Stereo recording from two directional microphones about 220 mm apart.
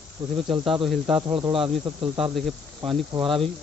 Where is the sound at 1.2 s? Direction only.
20° right (ahead or behind).